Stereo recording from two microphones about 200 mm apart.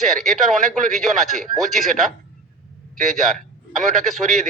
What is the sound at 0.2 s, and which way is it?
A man's voice, centre (ahead or behind).